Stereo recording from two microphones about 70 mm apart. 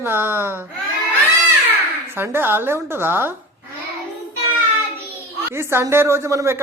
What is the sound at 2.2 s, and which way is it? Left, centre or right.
A woman's voice, right.